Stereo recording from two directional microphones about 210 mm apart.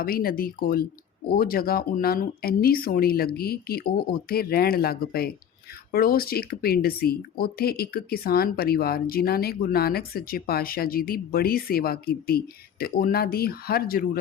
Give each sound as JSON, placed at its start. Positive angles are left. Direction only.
{"t": 0.0, "sound": "speech", "side_deg": 45}